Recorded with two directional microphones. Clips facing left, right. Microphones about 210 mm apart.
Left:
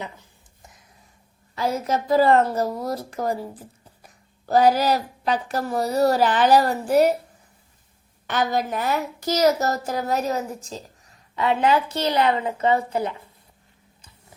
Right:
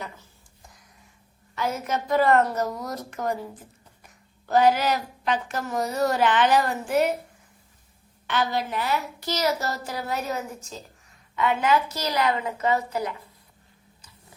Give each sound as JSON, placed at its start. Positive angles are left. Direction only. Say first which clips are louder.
{"t": 0.0, "sound": "a sound", "louder": "left 3 dB", "side_deg": 20}
{"t": 1.5, "sound": "a woman's voice", "louder": "left 4 dB", "side_deg": 35}
{"t": 8.3, "sound": "a woman's voice", "louder": "left 3 dB", "side_deg": 45}